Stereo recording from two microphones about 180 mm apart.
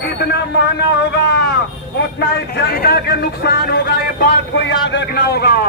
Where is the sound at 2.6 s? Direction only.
60° left (ahead or behind).